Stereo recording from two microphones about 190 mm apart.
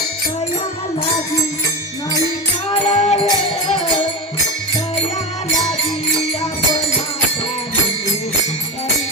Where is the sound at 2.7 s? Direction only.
35° left (ahead or behind).